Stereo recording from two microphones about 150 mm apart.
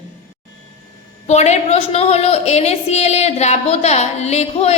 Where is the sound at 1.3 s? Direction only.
45° left (ahead or behind).